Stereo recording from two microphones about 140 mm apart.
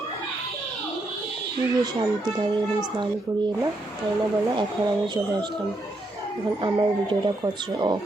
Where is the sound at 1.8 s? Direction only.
30° right (ahead or behind).